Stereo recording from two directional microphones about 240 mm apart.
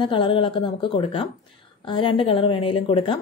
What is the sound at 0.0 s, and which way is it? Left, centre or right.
A woman's voice, centre.